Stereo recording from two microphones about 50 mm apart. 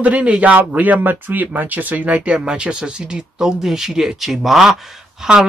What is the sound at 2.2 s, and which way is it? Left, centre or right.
A woman's voice, centre.